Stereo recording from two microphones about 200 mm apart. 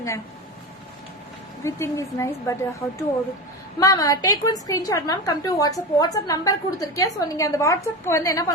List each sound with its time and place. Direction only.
1.6 s a woman's voice: 15° left (ahead or behind)